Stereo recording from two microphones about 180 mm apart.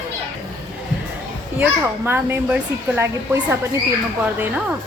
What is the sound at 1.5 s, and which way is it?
A child's voice, 10° right (ahead or behind).